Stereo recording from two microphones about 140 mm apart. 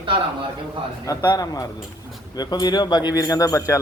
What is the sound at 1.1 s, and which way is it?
Speech, 25° left (ahead or behind).